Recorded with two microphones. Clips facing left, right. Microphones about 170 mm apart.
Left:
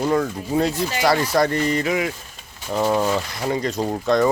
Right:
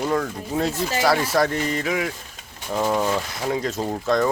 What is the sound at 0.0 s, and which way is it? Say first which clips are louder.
Speech: left 3 dB; 5° left (ahead or behind).